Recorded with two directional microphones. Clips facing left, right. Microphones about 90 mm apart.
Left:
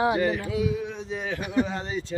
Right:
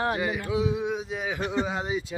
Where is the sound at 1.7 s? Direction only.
10° right (ahead or behind).